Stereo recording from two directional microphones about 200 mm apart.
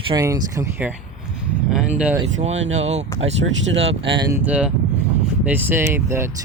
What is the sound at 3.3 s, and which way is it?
Speech, 70° right (ahead or behind).